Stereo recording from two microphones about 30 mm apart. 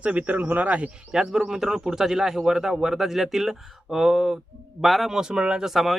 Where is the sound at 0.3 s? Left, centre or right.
Right.